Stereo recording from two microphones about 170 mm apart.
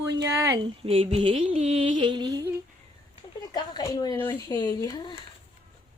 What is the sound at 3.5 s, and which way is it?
Speech, 25° left (ahead or behind).